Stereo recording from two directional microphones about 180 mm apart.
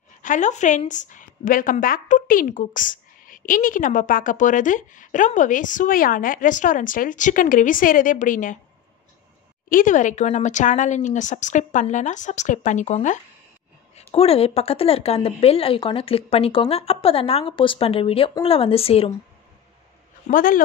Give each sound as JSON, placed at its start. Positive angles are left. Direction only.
{"t": 0.2, "sound": "speech", "side_deg": 45}
{"t": 9.7, "sound": "speech", "side_deg": 45}
{"t": 20.2, "sound": "speech", "side_deg": 50}